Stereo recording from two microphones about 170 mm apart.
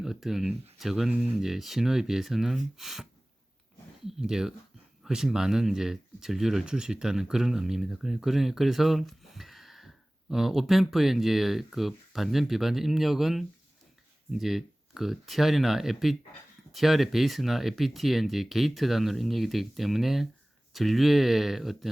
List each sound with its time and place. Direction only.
0.0 s speech: centre (ahead or behind)